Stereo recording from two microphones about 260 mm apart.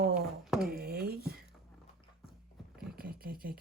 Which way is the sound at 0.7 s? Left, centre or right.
Right.